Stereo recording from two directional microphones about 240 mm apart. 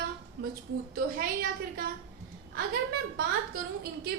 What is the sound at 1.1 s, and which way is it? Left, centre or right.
Speech, right.